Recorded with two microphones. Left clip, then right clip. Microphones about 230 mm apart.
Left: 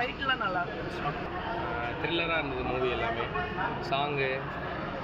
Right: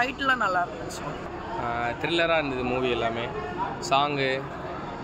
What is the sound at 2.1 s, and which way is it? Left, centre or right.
Speech, right.